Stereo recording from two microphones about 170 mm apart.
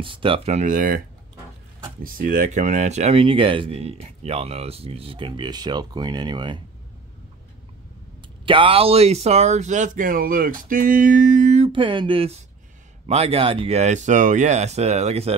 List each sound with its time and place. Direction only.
0.0 s speech: 30° right (ahead or behind); by 1.0 s 55° right (ahead or behind)
2.0 s speech: 55° right (ahead or behind); by 6.6 s 25° right (ahead or behind)
8.5 s speech: 30° right (ahead or behind)